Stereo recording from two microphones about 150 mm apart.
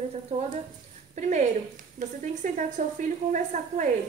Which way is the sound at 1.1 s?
50° right (ahead or behind).